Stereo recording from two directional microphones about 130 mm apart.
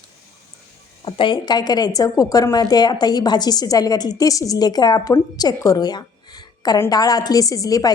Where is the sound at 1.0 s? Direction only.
40° left (ahead or behind).